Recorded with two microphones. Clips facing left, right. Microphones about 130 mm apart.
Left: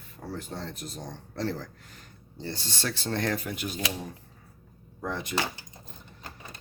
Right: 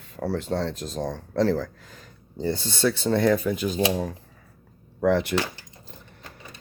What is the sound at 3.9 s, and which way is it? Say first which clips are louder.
Speech: right 10 dB; 90° right.